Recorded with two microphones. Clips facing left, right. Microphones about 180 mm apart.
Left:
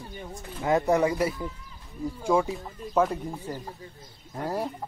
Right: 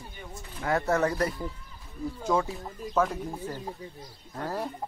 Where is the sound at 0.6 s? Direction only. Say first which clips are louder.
Left 3 dB; 15° left (ahead or behind).